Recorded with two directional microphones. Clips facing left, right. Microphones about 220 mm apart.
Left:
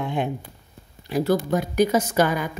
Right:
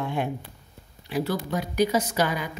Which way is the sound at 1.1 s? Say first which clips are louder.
Left 6 dB; 45° left (ahead or behind).